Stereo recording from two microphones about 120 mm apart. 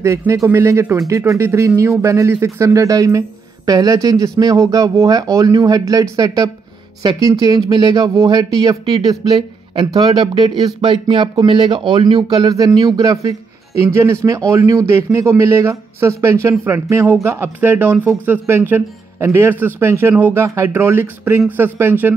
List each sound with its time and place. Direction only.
0.3 s speech: 20° right (ahead or behind)